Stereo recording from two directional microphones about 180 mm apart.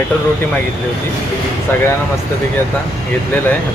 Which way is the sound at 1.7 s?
10° left (ahead or behind).